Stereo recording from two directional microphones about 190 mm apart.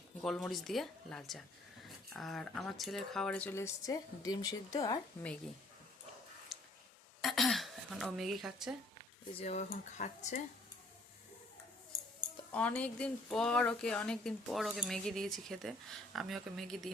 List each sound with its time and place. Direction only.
0.2 s speech: centre (ahead or behind); by 4.9 s 20° left (ahead or behind)
6.5 s a sound: centre (ahead or behind)
7.2 s throat clearing: centre (ahead or behind)
9.4 s speech: 35° left (ahead or behind)
12.5 s speech: 5° left (ahead or behind)